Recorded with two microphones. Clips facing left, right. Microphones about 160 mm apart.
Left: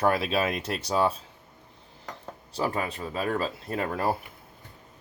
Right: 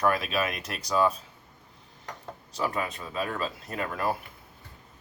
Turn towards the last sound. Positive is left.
turn(degrees=30)  # may be behind; listen again after turning